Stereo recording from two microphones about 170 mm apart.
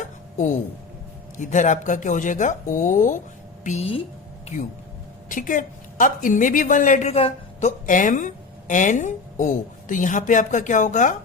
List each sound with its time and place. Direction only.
1.4 s a woman's voice: 45° left (ahead or behind)
5.3 s a woman's voice: 50° left (ahead or behind)
7.9 s a woman's voice: 50° left (ahead or behind)